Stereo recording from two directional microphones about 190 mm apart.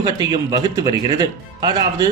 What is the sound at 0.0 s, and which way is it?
Speech, 20° right (ahead or behind).